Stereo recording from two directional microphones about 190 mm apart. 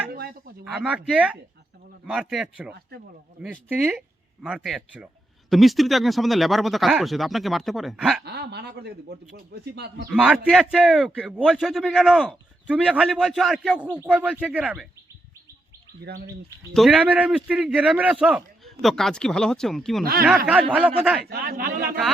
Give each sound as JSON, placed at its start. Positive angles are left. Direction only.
{"t": 0.1, "sound": "a sound", "side_deg": -50}
{"t": 0.6, "sound": "a man's voice", "side_deg": -5}
{"t": 8.2, "sound": "a man's voice", "side_deg": -60}
{"t": 10.1, "sound": "a man's voice", "side_deg": -5}
{"t": 16.0, "sound": "a man's voice", "side_deg": -55}
{"t": 16.7, "sound": "a man's voice", "side_deg": -5}
{"t": 21.2, "sound": "a man's voice", "side_deg": -50}